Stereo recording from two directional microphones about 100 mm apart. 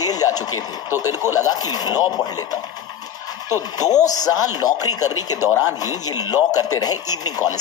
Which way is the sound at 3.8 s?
40° left (ahead or behind).